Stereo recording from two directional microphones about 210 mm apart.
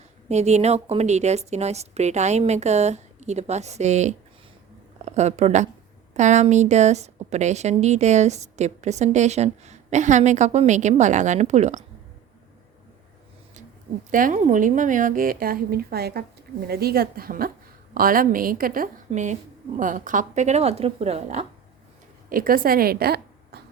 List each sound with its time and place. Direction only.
0.3 s a woman's voice: 30° right (ahead or behind)
14.1 s a woman's voice: 40° right (ahead or behind)
22.3 s a woman's voice: 45° right (ahead or behind)